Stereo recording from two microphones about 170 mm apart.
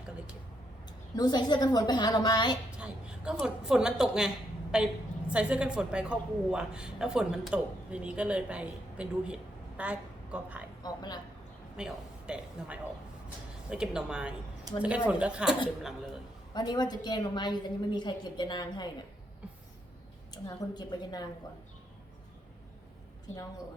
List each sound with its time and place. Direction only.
1.1 s a woman's voice: 25° left (ahead or behind)
2.7 s a woman's voice: 5° right (ahead or behind)
10.8 s a woman's voice: 25° left (ahead or behind)
11.8 s a woman's voice: 5° right (ahead or behind)
16.6 s a woman's voice: 25° left (ahead or behind)
20.3 s a woman's voice: 25° left (ahead or behind)